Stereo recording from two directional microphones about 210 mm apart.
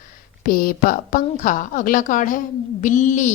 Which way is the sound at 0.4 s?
45° left (ahead or behind).